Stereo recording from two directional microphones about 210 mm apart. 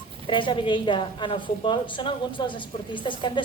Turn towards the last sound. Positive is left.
turn(degrees=25)  # may be behind; listen again after turning